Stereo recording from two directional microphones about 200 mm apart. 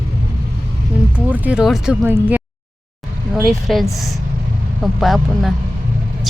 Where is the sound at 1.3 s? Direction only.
5° right (ahead or behind).